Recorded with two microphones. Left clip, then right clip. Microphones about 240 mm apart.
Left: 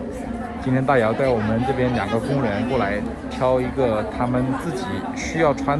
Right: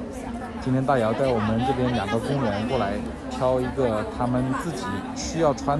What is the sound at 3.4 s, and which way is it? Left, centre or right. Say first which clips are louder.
Speech: left 3 dB; centre.